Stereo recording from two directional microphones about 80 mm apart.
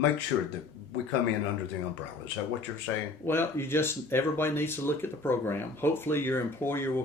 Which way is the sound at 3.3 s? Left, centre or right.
Left.